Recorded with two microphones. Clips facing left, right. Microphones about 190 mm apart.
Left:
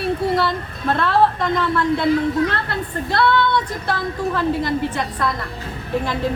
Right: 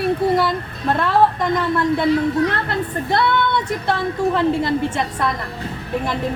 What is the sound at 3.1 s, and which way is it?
A woman's voice, 20° right (ahead or behind).